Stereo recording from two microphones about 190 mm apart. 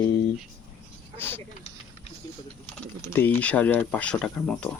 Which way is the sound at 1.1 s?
10° left (ahead or behind).